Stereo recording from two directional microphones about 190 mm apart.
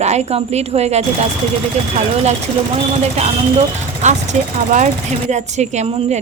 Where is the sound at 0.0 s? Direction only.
35° right (ahead or behind).